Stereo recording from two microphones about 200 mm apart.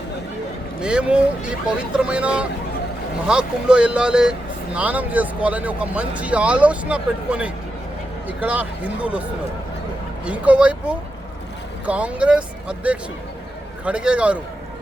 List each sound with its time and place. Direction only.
0.8 s speech: 5° right (ahead or behind)
10.2 s speech: 5° right (ahead or behind)